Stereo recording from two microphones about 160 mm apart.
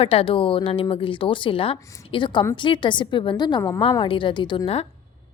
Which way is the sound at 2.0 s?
30° left (ahead or behind).